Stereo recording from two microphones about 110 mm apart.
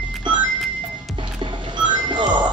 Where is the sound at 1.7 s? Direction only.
45° right (ahead or behind).